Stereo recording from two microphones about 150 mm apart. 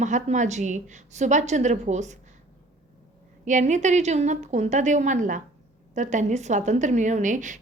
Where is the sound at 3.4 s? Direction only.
55° right (ahead or behind).